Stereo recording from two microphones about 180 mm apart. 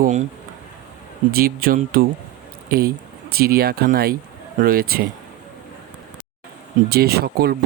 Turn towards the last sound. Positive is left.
turn(degrees=-60)  # may be behind; listen again after turning